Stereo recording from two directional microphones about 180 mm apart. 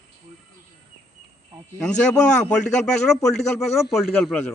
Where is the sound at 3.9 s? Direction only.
Centre (ahead or behind).